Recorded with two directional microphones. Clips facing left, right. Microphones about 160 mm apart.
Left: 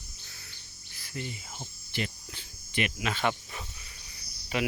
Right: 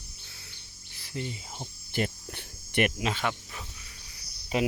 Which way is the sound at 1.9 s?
50° right (ahead or behind).